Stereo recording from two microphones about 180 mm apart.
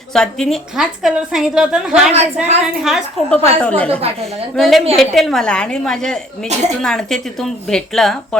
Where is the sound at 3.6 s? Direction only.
5° left (ahead or behind).